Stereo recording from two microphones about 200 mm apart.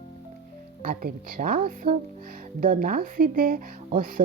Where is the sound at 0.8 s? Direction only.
45° right (ahead or behind).